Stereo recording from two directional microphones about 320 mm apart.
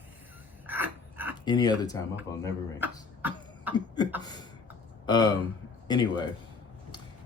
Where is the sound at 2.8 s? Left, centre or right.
Centre.